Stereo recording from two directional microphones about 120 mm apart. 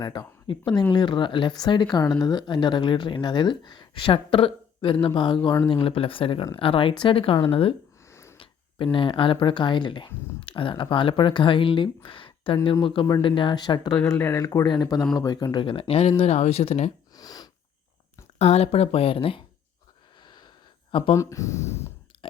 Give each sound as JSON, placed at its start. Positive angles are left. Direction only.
{"t": 0.0, "sound": "speech", "side_deg": 40}
{"t": 8.0, "sound": "a sound", "side_deg": 25}
{"t": 8.4, "sound": "speech", "side_deg": 45}
{"t": 14.1, "sound": "speech", "side_deg": 20}
{"t": 15.5, "sound": "speech", "side_deg": 50}
{"t": 17.2, "sound": "sniff", "side_deg": 30}
{"t": 18.3, "sound": "speech", "side_deg": 60}
{"t": 21.2, "sound": "speech", "side_deg": 25}
{"t": 22.2, "sound": "a sound", "side_deg": 45}